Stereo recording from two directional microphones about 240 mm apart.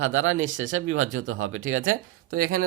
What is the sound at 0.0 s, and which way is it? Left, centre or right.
Speech, right.